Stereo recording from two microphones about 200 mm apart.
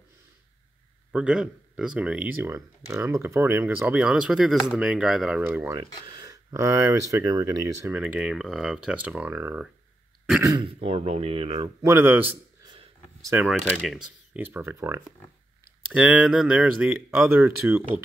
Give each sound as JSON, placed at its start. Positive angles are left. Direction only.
{"t": 1.1, "sound": "speech", "side_deg": -5}
{"t": 7.9, "sound": "speech", "side_deg": -5}
{"t": 10.6, "sound": "speech", "side_deg": -30}
{"t": 11.8, "sound": "speech", "side_deg": -10}
{"t": 13.5, "sound": "speech", "side_deg": 0}